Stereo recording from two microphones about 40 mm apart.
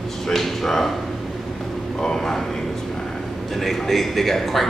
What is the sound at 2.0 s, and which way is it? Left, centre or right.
Speech, centre.